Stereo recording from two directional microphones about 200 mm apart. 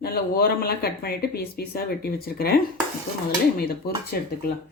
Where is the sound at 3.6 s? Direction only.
50° left (ahead or behind).